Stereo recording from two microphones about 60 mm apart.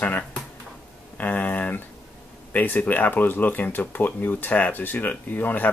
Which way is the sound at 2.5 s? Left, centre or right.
Left.